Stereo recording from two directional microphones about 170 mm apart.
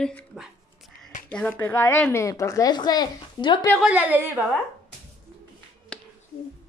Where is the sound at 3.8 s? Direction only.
5° right (ahead or behind).